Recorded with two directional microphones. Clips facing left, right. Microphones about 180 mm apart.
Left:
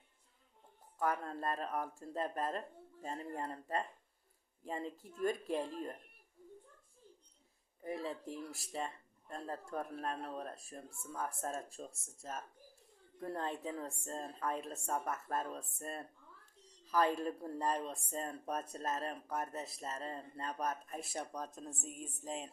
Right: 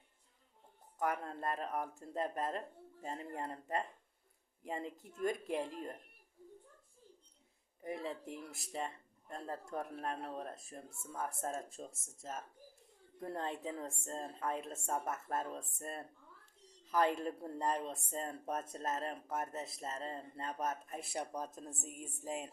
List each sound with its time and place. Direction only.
0.9 s speech: 20° right (ahead or behind)
7.8 s speech: 20° right (ahead or behind)
21.2 s speech: 10° right (ahead or behind)